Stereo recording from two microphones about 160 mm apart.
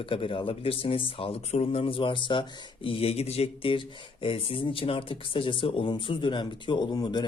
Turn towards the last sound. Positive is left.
turn(degrees=25)  # may be behind; listen again after turning